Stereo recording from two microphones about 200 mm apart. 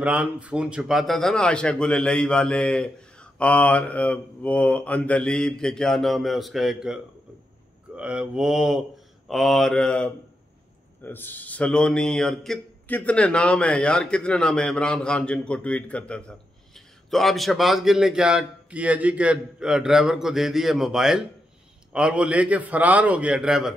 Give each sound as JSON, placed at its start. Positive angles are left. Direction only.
{"t": 0.0, "sound": "a man's voice", "side_deg": -5}